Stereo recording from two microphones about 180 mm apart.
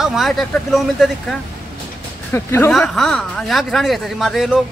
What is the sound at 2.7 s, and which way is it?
Speech, centre (ahead or behind).